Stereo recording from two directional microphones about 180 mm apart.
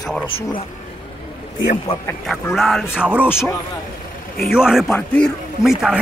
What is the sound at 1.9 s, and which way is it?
Speech, 30° left (ahead or behind).